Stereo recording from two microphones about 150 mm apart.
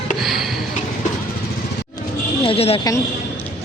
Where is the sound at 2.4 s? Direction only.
40° left (ahead or behind).